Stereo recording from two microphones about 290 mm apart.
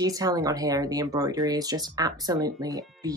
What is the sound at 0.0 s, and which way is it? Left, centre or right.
Speech, centre.